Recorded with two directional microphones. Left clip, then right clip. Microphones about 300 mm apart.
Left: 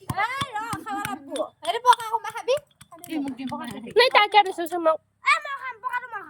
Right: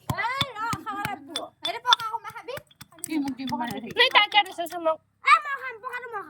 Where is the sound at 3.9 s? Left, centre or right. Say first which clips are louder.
Left 3 dB; centre.